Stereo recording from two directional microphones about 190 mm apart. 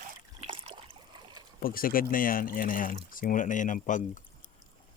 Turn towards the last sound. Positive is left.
turn(degrees=40)  # may be behind; listen again after turning